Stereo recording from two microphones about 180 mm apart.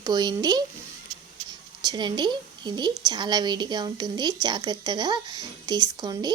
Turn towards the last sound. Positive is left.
turn(degrees=-20)  # may be behind; listen again after turning